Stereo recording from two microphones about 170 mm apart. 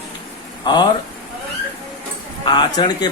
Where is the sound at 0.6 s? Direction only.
25° left (ahead or behind).